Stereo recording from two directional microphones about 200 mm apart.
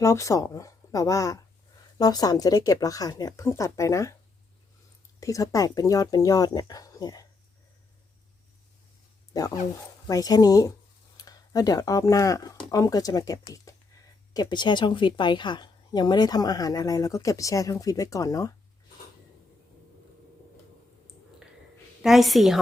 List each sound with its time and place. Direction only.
0.0 s speech: 15° left (ahead or behind)
5.2 s speech: 15° left (ahead or behind)
9.3 s a woman's voice: 15° left (ahead or behind)
22.0 s a woman's voice: centre (ahead or behind)